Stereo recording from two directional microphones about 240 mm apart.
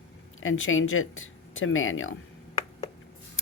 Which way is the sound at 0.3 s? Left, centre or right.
Left.